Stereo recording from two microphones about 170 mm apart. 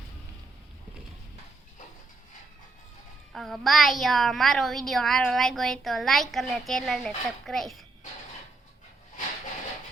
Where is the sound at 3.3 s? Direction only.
Centre (ahead or behind).